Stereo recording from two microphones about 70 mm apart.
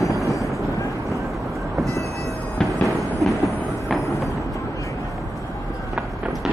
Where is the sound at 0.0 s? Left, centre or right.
Left.